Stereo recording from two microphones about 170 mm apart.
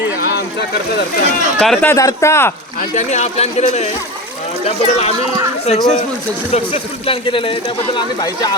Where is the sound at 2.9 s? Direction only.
40° left (ahead or behind).